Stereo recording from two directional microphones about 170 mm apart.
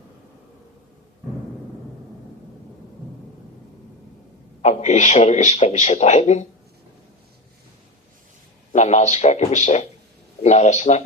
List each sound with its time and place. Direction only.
4.6 s a man's voice: 45° left (ahead or behind)
8.7 s a man's voice: 40° left (ahead or behind)